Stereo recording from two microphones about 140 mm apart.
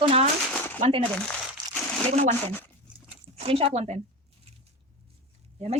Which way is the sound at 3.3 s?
45° right (ahead or behind).